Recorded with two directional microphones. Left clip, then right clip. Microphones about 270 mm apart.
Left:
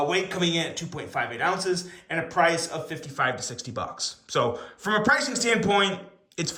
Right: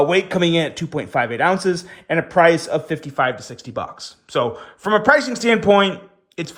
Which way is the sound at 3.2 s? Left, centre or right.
Centre.